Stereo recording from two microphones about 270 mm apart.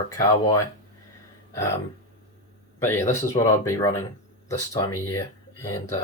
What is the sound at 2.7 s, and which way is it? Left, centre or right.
Speech, centre.